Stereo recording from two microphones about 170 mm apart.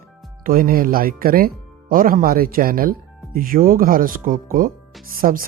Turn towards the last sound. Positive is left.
turn(degrees=-55)  # may be behind; listen again after turning